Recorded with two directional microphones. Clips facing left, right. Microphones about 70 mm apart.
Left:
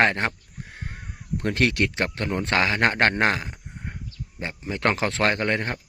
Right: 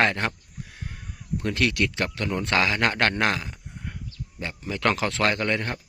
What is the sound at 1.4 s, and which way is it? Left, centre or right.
Speech, left.